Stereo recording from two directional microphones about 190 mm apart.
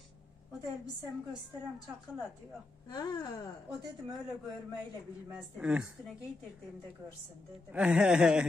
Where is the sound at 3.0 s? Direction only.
20° left (ahead or behind).